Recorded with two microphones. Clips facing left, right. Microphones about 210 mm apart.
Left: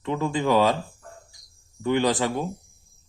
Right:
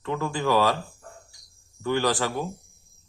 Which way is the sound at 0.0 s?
20° left (ahead or behind).